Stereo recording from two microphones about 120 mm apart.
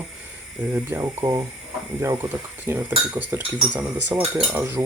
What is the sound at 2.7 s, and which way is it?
Cutlery, 20° right (ahead or behind).